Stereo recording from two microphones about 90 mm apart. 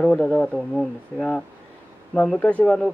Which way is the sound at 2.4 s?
15° left (ahead or behind).